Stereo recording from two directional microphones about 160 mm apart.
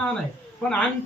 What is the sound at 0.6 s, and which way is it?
Speech, 5° left (ahead or behind).